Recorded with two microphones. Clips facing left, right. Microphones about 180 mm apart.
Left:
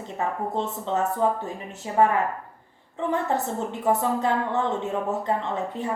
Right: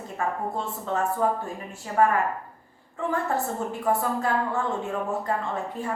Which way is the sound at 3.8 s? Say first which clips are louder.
Left 3 dB; 20° left (ahead or behind).